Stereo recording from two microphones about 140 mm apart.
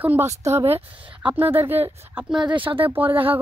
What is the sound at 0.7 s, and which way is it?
Speech, 40° right (ahead or behind).